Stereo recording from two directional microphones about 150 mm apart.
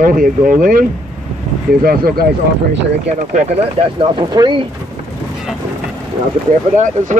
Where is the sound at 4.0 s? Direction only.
30° right (ahead or behind).